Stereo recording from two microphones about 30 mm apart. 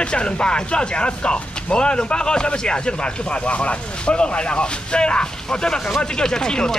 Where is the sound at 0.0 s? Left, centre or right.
Left.